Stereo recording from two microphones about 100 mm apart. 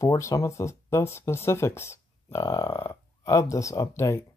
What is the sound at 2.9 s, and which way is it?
Speech, 30° left (ahead or behind).